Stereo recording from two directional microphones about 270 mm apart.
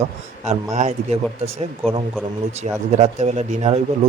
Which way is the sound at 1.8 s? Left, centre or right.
Centre.